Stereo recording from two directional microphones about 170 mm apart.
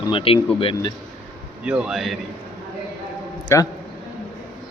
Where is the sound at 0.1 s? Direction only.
35° left (ahead or behind).